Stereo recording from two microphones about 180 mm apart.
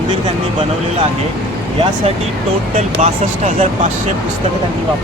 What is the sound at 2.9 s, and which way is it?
Speech, 40° right (ahead or behind).